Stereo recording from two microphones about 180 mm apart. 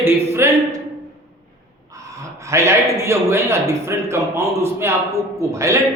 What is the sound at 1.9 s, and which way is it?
A man's voice, 20° right (ahead or behind).